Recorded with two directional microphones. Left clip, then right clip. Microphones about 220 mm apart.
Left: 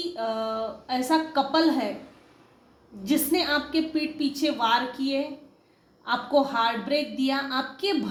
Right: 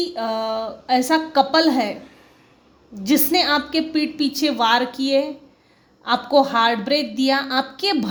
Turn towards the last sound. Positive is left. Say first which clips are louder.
# right 6 dB
turn(degrees=-45)  # may be behind; listen again after turning